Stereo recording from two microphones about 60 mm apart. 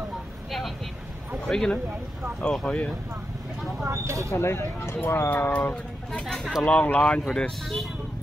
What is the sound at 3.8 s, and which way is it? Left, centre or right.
Speech, right.